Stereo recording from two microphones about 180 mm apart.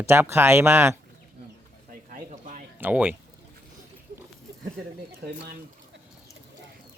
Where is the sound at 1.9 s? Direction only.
50° right (ahead or behind).